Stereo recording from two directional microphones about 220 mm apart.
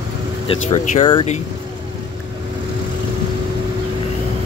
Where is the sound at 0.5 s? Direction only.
25° left (ahead or behind).